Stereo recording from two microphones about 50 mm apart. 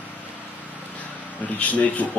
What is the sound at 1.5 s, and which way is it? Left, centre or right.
Speech, left.